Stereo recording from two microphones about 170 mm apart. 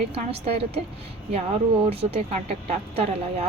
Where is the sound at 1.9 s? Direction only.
35° right (ahead or behind).